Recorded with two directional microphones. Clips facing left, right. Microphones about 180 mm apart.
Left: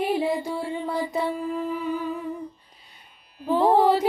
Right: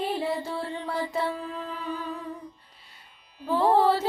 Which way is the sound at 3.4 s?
15° left (ahead or behind).